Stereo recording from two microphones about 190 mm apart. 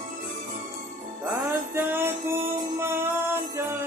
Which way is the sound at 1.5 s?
10° right (ahead or behind).